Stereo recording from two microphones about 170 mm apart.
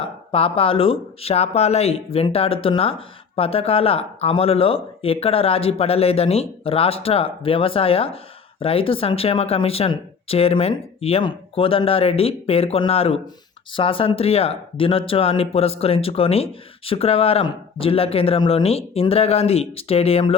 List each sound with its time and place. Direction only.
0.3 s speech: 35° left (ahead or behind)